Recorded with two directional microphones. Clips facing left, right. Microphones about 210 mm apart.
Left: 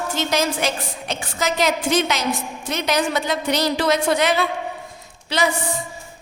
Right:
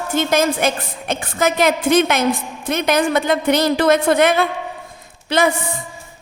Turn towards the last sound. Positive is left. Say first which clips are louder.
# right 5 dB
turn(degrees=-55)  # may be behind; listen again after turning